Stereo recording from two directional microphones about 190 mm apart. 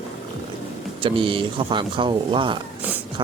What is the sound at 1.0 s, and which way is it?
Speech, 25° right (ahead or behind).